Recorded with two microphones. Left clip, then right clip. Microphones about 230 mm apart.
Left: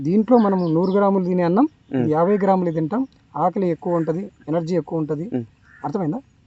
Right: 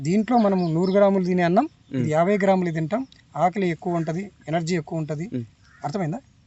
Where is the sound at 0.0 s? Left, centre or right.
Right.